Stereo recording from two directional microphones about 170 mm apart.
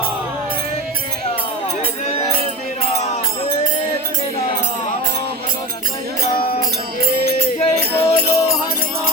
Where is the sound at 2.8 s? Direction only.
40° left (ahead or behind).